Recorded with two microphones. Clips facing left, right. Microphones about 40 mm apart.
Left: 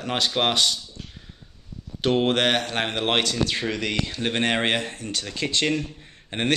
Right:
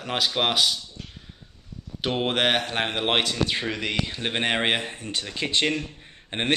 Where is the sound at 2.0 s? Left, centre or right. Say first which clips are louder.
Left 3 dB; centre.